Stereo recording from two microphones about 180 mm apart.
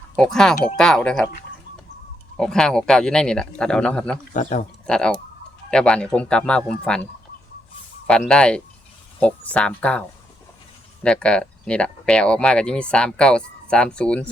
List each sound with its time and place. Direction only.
0.2 s speech: 5° left (ahead or behind)
2.4 s speech: 5° left (ahead or behind)
4.4 s speech: 40° left (ahead or behind)
4.9 s speech: 5° left (ahead or behind)
11.0 s speech: 5° left (ahead or behind)